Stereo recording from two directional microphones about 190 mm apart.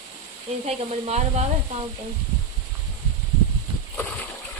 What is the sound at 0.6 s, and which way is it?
Speech, 35° right (ahead or behind).